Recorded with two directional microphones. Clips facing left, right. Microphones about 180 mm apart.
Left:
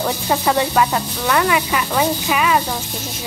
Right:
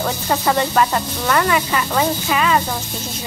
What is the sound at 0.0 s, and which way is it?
Speech, 5° left (ahead or behind).